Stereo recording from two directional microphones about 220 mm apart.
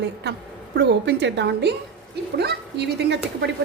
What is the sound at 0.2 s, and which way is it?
A woman's voice, 50° right (ahead or behind).